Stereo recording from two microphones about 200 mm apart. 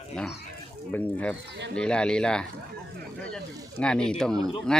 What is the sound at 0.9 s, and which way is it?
Speech, 5° left (ahead or behind).